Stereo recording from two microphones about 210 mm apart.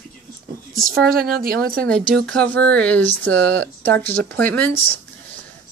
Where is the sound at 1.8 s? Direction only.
5° left (ahead or behind).